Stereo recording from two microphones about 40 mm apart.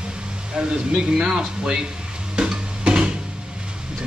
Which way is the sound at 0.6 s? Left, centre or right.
Centre.